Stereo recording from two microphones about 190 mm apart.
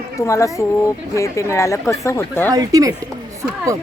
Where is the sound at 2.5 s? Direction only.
20° right (ahead or behind).